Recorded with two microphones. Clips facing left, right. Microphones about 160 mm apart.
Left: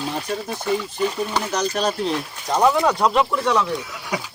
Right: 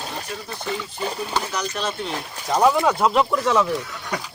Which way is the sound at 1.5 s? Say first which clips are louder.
Left 5 dB; 40° left (ahead or behind).